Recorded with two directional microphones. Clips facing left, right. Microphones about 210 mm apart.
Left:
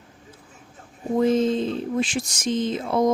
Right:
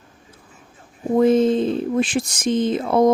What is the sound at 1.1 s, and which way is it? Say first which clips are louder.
Speech: right 4 dB; 55° right (ahead or behind).